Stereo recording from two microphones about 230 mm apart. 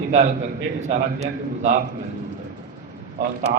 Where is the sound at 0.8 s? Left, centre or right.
Right.